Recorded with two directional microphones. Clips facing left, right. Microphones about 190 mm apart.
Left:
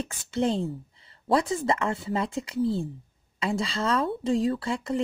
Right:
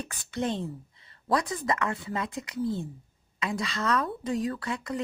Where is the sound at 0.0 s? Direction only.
25° left (ahead or behind).